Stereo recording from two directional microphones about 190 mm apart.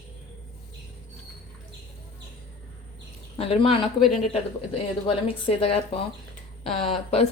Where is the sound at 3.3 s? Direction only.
30° left (ahead or behind).